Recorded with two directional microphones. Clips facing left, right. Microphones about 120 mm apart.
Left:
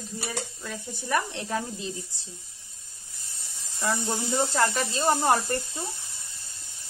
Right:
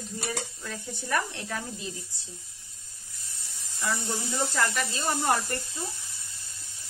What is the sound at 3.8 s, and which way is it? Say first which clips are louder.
Speech: left 3 dB; 30° left (ahead or behind).